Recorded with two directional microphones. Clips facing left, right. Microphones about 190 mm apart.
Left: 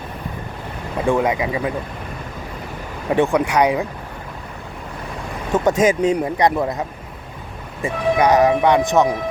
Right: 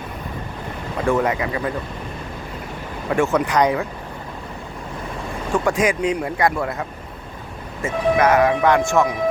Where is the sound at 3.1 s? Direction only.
15° left (ahead or behind).